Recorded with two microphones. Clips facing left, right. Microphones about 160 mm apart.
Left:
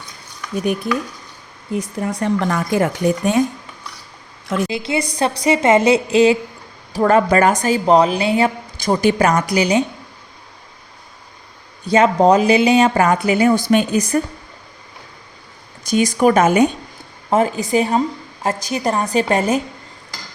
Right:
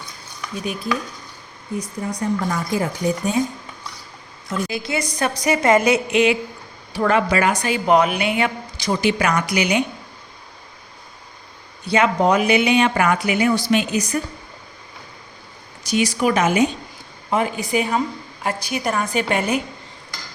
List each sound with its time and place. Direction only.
0.5 s stir: 60° left (ahead or behind)
1.7 s speech: 80° left
2.6 s speech: 65° left (ahead or behind)
4.4 s a woman's voice: 90° left
4.7 s a woman's voice: 25° left (ahead or behind); by 7.8 s 45° left (ahead or behind)
7.9 s speech: 30° left (ahead or behind)
8.8 s speech: 45° left (ahead or behind)
11.9 s speech: 40° left (ahead or behind)
15.9 s a woman's voice: 45° left (ahead or behind)